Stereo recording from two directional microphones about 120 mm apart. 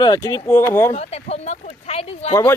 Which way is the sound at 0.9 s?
60° left (ahead or behind).